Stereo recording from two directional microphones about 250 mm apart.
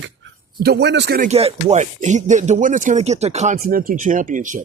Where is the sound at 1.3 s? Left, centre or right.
Right.